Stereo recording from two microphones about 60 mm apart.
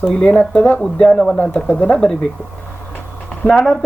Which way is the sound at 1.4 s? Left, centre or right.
Left.